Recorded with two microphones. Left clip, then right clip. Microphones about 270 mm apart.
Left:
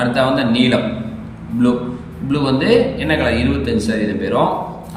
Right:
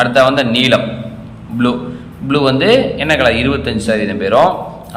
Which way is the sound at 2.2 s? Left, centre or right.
Centre.